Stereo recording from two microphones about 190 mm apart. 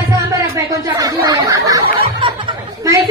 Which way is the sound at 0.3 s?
15° right (ahead or behind).